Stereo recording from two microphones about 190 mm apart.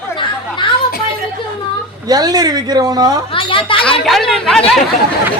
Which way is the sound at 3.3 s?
25° left (ahead or behind).